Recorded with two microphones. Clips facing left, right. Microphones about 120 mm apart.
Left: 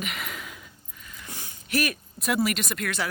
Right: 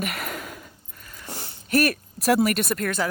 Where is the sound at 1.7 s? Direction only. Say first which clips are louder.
Right 6 dB; 50° right (ahead or behind).